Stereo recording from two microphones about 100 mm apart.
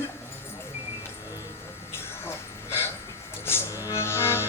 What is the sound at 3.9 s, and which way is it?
Music, 25° left (ahead or behind).